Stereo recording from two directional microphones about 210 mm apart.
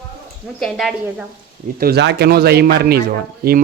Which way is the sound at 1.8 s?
50° right (ahead or behind).